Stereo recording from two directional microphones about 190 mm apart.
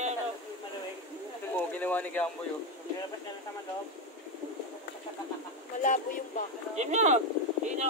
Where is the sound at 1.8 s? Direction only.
10° left (ahead or behind).